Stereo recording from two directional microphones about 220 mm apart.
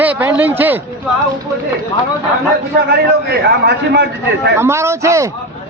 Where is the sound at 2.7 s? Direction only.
45° right (ahead or behind).